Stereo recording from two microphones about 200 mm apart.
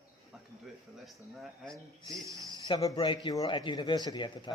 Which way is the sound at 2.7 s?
20° left (ahead or behind).